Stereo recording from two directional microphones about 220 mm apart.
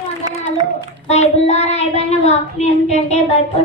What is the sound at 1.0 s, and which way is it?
Child singing, 30° left (ahead or behind).